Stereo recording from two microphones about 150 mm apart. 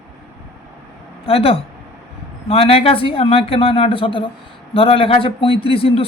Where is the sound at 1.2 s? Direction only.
40° left (ahead or behind).